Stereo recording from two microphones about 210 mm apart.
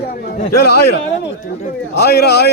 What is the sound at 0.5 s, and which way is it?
A man's voice, 50° left (ahead or behind).